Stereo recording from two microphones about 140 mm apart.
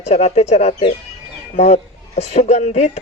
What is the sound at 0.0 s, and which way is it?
Speech, 50° left (ahead or behind).